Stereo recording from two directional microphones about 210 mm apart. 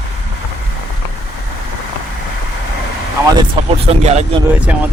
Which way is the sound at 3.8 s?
30° right (ahead or behind).